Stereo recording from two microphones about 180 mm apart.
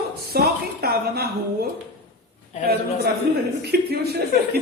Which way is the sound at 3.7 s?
60° right (ahead or behind).